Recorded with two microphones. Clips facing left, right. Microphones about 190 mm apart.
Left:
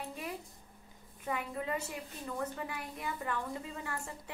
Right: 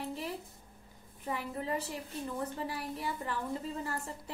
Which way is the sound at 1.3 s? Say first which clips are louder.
Right 1 dB; 35° right (ahead or behind).